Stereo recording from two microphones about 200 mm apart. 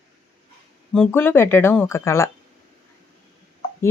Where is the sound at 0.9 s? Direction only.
5° left (ahead or behind).